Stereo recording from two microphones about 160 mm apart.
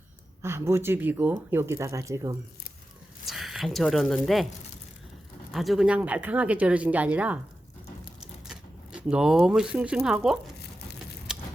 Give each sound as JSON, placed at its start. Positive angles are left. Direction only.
{"t": 0.4, "sound": "speech", "side_deg": -15}
{"t": 3.2, "sound": "speech", "side_deg": 0}
{"t": 5.5, "sound": "speech", "side_deg": 0}
{"t": 8.4, "sound": "speech", "side_deg": -5}
{"t": 11.3, "sound": "vehicle", "side_deg": -5}